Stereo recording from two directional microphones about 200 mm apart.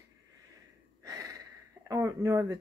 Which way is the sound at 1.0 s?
15° right (ahead or behind).